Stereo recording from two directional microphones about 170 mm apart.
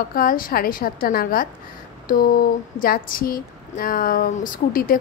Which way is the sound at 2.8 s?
55° left (ahead or behind).